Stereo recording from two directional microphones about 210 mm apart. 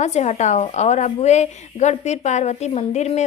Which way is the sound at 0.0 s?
35° left (ahead or behind).